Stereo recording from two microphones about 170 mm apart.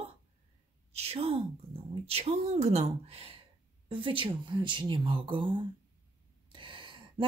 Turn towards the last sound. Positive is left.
turn(degrees=-30)  # may be behind; listen again after turning